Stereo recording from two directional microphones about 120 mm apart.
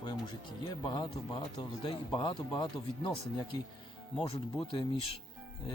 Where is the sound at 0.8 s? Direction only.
40° left (ahead or behind).